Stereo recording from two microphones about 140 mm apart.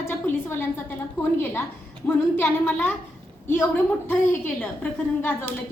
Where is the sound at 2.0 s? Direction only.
15° left (ahead or behind).